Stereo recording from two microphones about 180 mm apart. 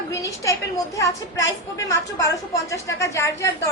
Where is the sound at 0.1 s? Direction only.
15° left (ahead or behind).